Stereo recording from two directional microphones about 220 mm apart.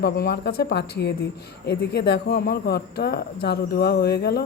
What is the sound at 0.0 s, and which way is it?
Speech, 45° left (ahead or behind).